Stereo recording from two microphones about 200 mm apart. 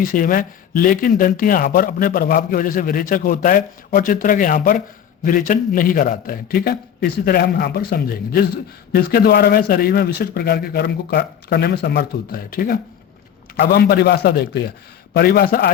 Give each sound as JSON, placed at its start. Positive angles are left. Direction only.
{"t": 0.0, "sound": "speech", "side_deg": 45}